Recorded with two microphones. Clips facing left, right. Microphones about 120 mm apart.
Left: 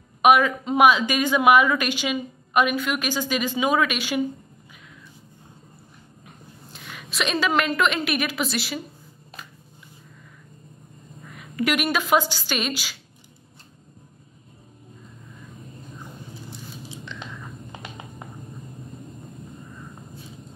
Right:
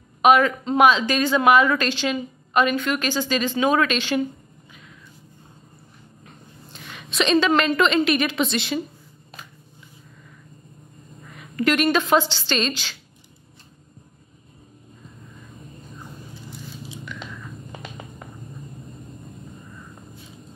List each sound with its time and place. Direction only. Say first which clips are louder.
0.2 s speech: right 1 dB; 10° left (ahead or behind)
7.0 s a woman's voice: right 6 dB; 5° left (ahead or behind)
11.5 s speech: right 4 dB; 10° left (ahead or behind)
17.0 s biting: right 1 dB; 25° left (ahead or behind)